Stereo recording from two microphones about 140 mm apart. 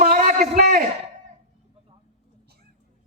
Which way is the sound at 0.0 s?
65° right (ahead or behind).